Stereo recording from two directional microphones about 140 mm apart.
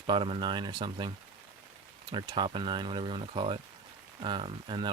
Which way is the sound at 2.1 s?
35° right (ahead or behind).